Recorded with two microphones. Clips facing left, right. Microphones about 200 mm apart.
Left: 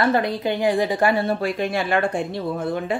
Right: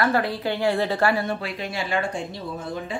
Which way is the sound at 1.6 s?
55° left (ahead or behind).